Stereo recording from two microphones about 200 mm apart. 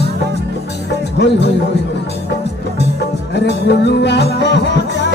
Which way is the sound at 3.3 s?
55° left (ahead or behind).